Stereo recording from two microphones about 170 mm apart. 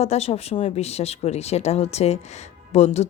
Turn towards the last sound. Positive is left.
turn(degrees=40)  # may be behind; listen again after turning